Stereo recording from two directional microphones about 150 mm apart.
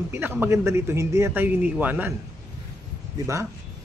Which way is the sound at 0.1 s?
15° right (ahead or behind).